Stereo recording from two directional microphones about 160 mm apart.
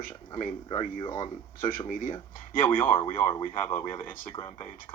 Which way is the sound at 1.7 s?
60° left (ahead or behind).